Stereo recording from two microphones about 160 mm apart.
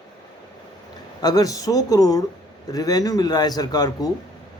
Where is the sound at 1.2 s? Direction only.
25° left (ahead or behind).